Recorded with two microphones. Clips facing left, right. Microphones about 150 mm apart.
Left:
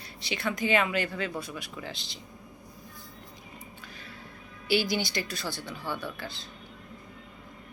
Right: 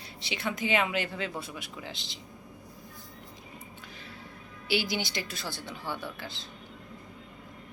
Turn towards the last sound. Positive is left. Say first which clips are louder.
# left 2 dB
turn(degrees=-15)  # may be behind; listen again after turning